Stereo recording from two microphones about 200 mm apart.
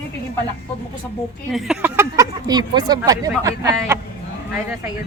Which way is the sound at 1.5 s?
5° right (ahead or behind).